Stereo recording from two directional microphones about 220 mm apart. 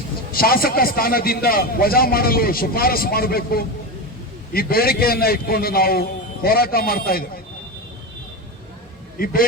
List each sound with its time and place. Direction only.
0.3 s a man's voice: 40° left (ahead or behind)
9.1 s speech: 40° left (ahead or behind)